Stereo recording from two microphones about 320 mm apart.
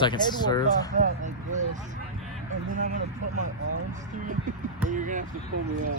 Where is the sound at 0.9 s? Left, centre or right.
Right.